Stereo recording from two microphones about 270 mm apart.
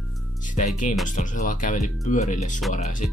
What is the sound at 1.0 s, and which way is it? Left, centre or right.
Speech, left.